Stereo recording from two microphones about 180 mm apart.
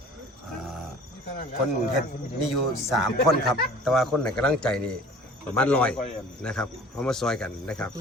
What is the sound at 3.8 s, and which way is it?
A man's voice, centre (ahead or behind).